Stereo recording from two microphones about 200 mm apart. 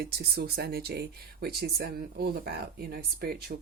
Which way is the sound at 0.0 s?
50° right (ahead or behind).